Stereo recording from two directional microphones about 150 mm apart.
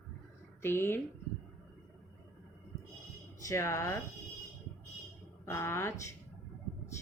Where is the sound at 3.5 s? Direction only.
20° left (ahead or behind).